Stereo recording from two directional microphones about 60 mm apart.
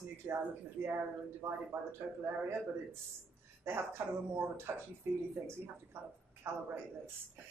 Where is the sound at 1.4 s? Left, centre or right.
Right.